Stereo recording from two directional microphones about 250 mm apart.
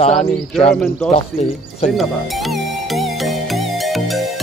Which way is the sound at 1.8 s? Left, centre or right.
Centre.